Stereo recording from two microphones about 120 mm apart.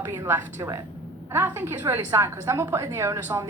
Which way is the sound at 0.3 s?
20° right (ahead or behind).